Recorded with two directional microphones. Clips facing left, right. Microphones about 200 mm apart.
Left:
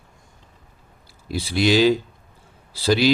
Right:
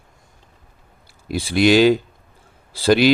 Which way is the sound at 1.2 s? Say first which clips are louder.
Right 4 dB; 55° right (ahead or behind).